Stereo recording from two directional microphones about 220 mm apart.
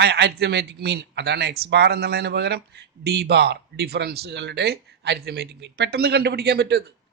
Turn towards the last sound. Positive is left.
turn(degrees=-50)  # may be behind; listen again after turning